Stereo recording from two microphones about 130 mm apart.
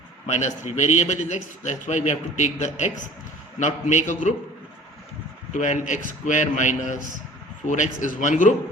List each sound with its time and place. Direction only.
0.3 s a man's voice: 60° left (ahead or behind)
4.1 s a man's voice: 75° left (ahead or behind)
5.5 s a man's voice: 65° left (ahead or behind)